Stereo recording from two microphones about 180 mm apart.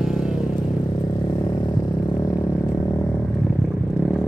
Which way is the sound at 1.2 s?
25° left (ahead or behind).